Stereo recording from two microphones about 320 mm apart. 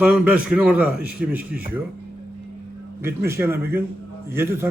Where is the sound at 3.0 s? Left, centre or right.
Centre.